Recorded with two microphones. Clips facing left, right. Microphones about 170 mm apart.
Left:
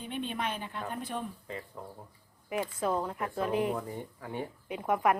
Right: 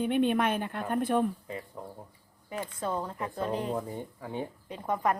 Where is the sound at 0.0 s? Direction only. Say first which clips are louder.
Right 9 dB; 60° right (ahead or behind).